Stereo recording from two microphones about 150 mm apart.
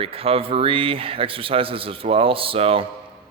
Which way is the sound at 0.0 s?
40° right (ahead or behind).